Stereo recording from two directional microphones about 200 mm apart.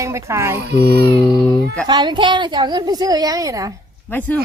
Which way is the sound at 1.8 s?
20° right (ahead or behind).